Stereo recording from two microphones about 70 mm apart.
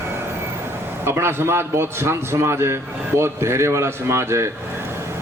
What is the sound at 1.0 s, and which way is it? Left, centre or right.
A man's voice, right.